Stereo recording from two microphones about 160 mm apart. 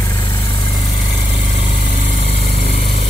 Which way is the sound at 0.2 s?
25° left (ahead or behind).